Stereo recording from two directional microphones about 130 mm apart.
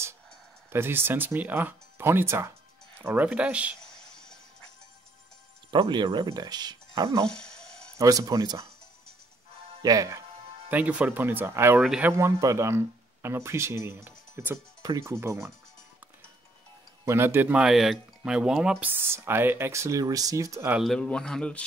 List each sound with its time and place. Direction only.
0.7 s speech: 20° right (ahead or behind)
5.7 s speech: 35° right (ahead or behind)
7.2 s a sound: 5° left (ahead or behind)
8.0 s speech: 25° right (ahead or behind)
9.8 s speech: 25° right (ahead or behind)
10.7 s speech: 10° right (ahead or behind)
11.8 s speech: 5° right (ahead or behind)
12.1 s speech: 20° right (ahead or behind)
17.0 s speech: 20° right (ahead or behind)
20.8 s a man's voice: 5° left (ahead or behind)